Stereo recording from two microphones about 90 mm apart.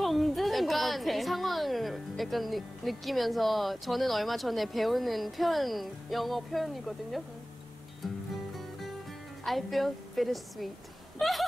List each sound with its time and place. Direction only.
0.0 s a woman's voice: centre (ahead or behind)
9.4 s a woman's voice: centre (ahead or behind)
11.1 s a sound: centre (ahead or behind)